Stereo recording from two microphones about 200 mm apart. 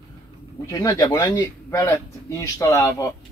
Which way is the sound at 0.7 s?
15° left (ahead or behind).